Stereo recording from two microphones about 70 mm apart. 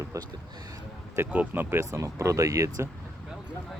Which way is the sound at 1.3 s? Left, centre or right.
Right.